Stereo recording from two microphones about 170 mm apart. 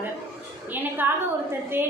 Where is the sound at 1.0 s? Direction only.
10° right (ahead or behind).